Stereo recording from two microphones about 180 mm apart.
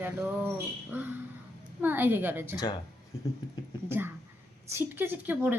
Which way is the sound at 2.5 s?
20° left (ahead or behind).